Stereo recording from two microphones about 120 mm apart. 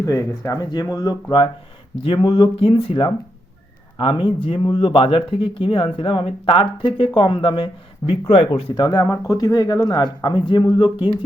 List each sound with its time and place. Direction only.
0.0 s speech: 25° left (ahead or behind)
2.6 s speech: 50° left (ahead or behind)